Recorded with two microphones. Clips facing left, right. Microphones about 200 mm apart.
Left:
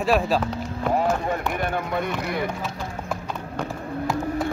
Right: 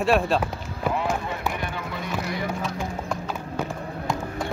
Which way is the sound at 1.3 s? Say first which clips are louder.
Left 4 dB; 50° left (ahead or behind).